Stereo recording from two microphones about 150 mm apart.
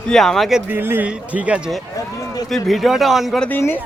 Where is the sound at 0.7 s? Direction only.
15° right (ahead or behind).